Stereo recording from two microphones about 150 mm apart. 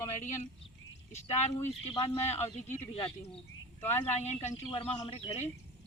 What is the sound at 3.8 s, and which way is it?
Speech, 15° left (ahead or behind).